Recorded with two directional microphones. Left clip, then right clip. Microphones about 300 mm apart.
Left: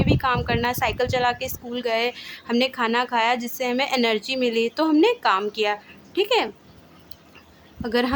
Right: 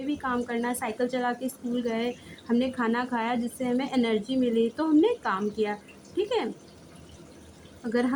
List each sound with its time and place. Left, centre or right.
0.2 s a woman's voice: left